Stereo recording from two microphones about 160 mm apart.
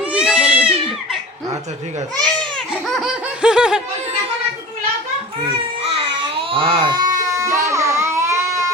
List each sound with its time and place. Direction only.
0.0 s cat: 5° right (ahead or behind)
2.1 s laughter: 5° left (ahead or behind)
5.8 s baby cry: 35° right (ahead or behind)
7.3 s a sound: 20° right (ahead or behind)
7.6 s baby cry: 20° right (ahead or behind)